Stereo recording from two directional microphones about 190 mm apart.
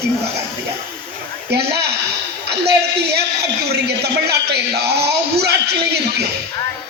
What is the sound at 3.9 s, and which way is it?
A man's voice, 60° right (ahead or behind).